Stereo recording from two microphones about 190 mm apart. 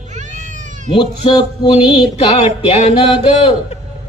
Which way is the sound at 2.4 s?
35° left (ahead or behind).